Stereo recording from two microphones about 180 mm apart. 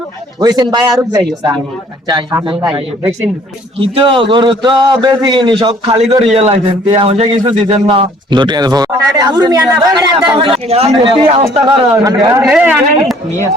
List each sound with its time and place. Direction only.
0.3 s speech: 20° right (ahead or behind)
3.8 s speech: 30° right (ahead or behind)
10.3 s a man's voice: 30° right (ahead or behind)
11.6 s speech: 20° right (ahead or behind)
12.5 s a man's voice: 5° right (ahead or behind)